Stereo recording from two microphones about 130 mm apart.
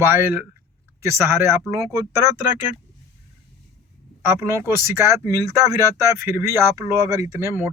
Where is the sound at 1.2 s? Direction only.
15° right (ahead or behind).